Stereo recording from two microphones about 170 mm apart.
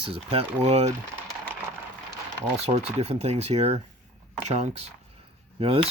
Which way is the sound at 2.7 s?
40° right (ahead or behind).